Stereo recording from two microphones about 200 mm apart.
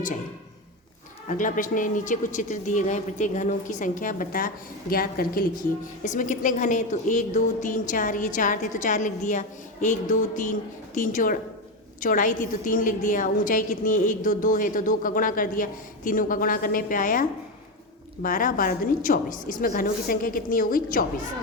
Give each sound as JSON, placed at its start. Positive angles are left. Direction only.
{"t": 1.3, "sound": "a woman's voice", "side_deg": 40}